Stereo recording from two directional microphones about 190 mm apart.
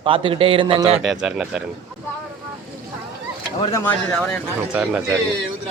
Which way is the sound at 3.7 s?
10° left (ahead or behind).